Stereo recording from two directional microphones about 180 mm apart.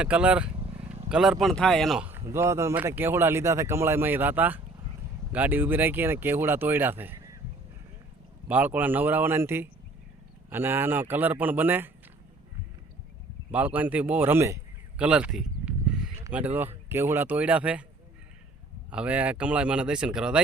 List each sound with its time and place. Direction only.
0.0 s speech: 5° right (ahead or behind)
0.5 s vehicle: 30° right (ahead or behind)
1.1 s speech: 5° right (ahead or behind)
8.4 s speech: 10° right (ahead or behind)
13.5 s speech: 10° right (ahead or behind)
18.9 s speech: 5° right (ahead or behind)